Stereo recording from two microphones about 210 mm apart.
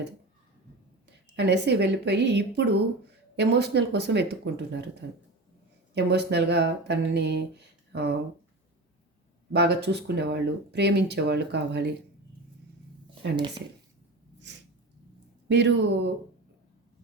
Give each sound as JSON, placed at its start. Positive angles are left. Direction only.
{"t": 1.4, "sound": "speech", "side_deg": -55}
{"t": 9.5, "sound": "speech", "side_deg": -50}
{"t": 15.4, "sound": "speech", "side_deg": -55}